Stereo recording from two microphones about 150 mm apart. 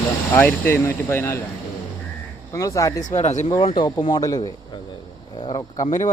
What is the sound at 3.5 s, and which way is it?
Speech, 35° left (ahead or behind).